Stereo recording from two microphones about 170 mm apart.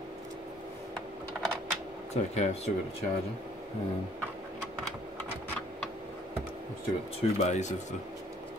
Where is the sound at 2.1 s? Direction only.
40° left (ahead or behind).